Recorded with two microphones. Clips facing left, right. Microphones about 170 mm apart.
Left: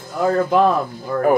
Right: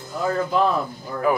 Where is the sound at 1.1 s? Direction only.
60° left (ahead or behind).